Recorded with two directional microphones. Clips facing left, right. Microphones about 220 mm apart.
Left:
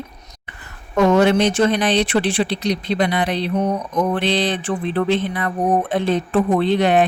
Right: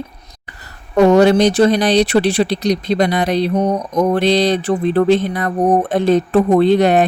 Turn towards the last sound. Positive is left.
turn(degrees=-40)  # may be behind; listen again after turning